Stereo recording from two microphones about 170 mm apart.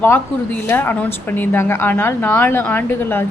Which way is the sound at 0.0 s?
10° left (ahead or behind).